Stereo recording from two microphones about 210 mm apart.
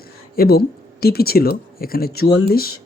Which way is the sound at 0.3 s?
45° left (ahead or behind).